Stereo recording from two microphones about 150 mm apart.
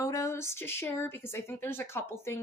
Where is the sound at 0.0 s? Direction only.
20° left (ahead or behind).